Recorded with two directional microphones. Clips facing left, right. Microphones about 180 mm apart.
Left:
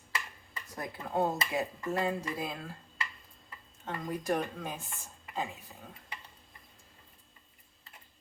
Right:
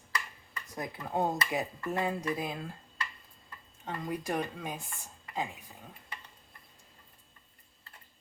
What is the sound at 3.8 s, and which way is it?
Speech, 10° right (ahead or behind).